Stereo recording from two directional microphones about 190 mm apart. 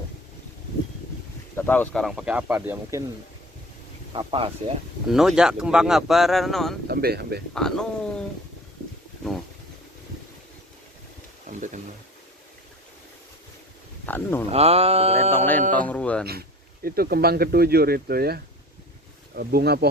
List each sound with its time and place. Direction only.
1.5 s speech: 10° left (ahead or behind); by 3.0 s 10° right (ahead or behind)
4.1 s speech: 25° right (ahead or behind)
5.0 s speech: centre (ahead or behind)
6.8 s speech: 55° right (ahead or behind)
7.5 s speech: 5° left (ahead or behind)
11.4 s a sound: 40° right (ahead or behind)
14.1 s speech: 10° left (ahead or behind)
14.5 s mantra: 30° right (ahead or behind)
15.7 s speech: 5° left (ahead or behind)
16.8 s speech: 50° right (ahead or behind)
19.4 s speech: 55° right (ahead or behind)